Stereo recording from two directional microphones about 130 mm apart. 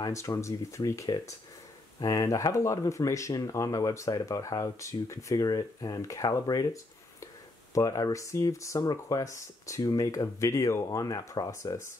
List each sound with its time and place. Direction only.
0.0 s speech: 25° left (ahead or behind)